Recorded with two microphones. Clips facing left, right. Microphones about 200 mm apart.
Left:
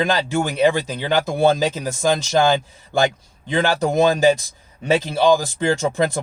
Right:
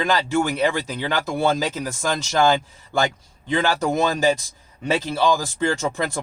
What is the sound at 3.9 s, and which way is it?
Speech, 15° left (ahead or behind).